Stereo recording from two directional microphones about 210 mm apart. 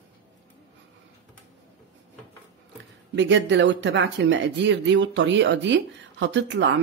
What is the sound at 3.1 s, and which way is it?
Speech, 55° right (ahead or behind).